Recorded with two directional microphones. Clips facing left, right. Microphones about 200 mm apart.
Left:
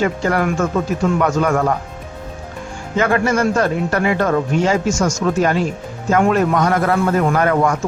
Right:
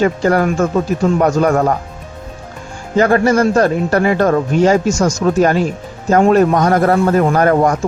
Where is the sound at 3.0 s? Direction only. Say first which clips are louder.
Right 5 dB; 40° right (ahead or behind).